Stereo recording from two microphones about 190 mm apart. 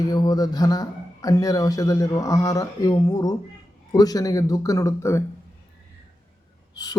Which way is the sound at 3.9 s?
20° left (ahead or behind).